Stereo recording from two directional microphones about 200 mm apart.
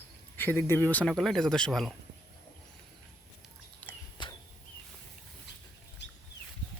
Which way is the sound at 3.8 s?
10° left (ahead or behind).